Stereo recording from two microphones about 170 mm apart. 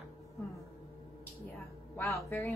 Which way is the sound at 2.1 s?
Centre (ahead or behind).